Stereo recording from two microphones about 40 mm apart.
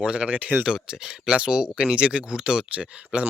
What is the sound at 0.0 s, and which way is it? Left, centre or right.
Speech, right.